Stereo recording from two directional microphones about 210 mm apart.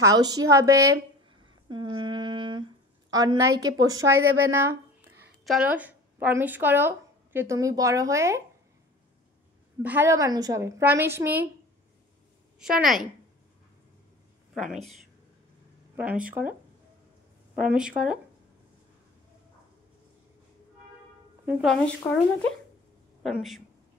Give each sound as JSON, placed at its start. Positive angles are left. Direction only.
{"t": 0.0, "sound": "a woman's voice", "side_deg": -15}
{"t": 1.7, "sound": "humming", "side_deg": -20}
{"t": 3.1, "sound": "a woman's voice", "side_deg": -20}
{"t": 9.8, "sound": "a woman's voice", "side_deg": -10}
{"t": 12.5, "sound": "speech", "side_deg": 0}
{"t": 14.5, "sound": "speech", "side_deg": 0}
{"t": 17.6, "sound": "speech", "side_deg": -5}
{"t": 21.5, "sound": "speech", "side_deg": 0}